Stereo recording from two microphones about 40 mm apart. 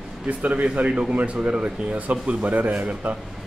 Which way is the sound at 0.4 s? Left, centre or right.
Right.